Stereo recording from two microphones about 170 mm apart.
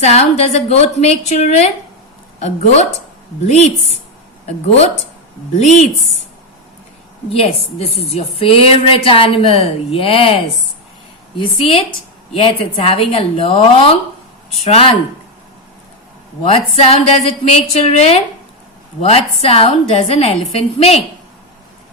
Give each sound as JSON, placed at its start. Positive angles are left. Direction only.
{"t": 0.0, "sound": "a woman's voice", "side_deg": 40}
{"t": 7.3, "sound": "a woman's voice", "side_deg": 35}
{"t": 16.4, "sound": "a woman's voice", "side_deg": 35}